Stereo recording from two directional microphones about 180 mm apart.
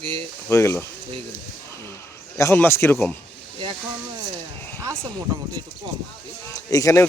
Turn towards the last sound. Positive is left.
turn(degrees=15)  # may be behind; listen again after turning